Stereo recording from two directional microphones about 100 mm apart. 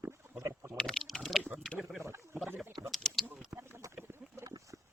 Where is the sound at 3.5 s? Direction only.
10° right (ahead or behind).